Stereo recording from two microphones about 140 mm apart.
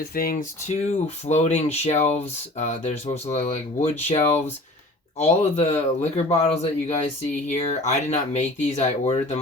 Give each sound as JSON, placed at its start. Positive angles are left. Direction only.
{"t": 0.1, "sound": "speech", "side_deg": 90}
{"t": 0.7, "sound": "speech", "side_deg": 55}